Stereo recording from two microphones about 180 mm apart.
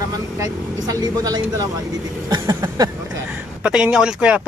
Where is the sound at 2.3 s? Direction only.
20° right (ahead or behind).